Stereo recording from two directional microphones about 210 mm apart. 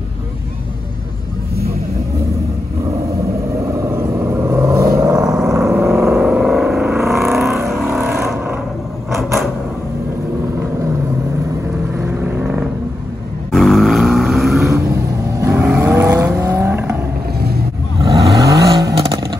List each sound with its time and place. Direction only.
3.5 s vehicle: 15° right (ahead or behind)
5.9 s vehicle: centre (ahead or behind)
12.0 s vehicle: 10° right (ahead or behind)
13.5 s a sound: centre (ahead or behind)
15.3 s vehicle: 10° right (ahead or behind)
18.3 s vehicle: 15° right (ahead or behind)